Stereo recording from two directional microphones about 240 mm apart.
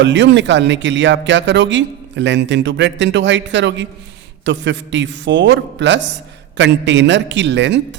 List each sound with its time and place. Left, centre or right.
0.0 s speech: right